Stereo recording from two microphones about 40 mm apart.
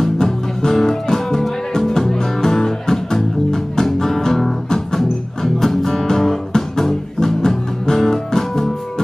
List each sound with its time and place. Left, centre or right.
0.0 s music: centre